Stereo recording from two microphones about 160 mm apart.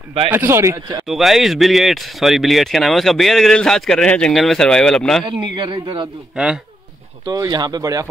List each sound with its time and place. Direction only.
0.3 s speech: 15° right (ahead or behind)
1.0 s speech: centre (ahead or behind)
5.6 s speech: 30° right (ahead or behind)
6.3 s speech: 5° right (ahead or behind)
7.2 s speech: 25° right (ahead or behind)